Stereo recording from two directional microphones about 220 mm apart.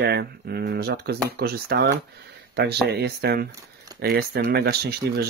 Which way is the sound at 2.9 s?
45° right (ahead or behind).